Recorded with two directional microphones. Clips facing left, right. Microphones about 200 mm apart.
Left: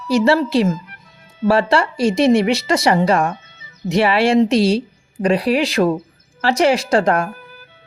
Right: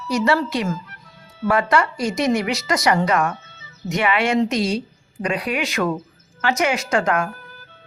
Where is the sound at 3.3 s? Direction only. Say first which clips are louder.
Left 2 dB; 15° left (ahead or behind).